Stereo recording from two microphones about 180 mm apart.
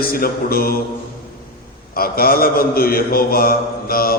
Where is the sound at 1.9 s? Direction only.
55° left (ahead or behind).